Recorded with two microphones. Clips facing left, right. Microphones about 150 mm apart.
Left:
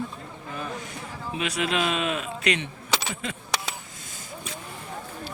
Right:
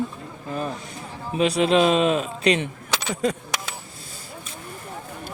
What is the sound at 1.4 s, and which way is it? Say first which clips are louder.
Speech: right 9 dB; 30° right (ahead or behind).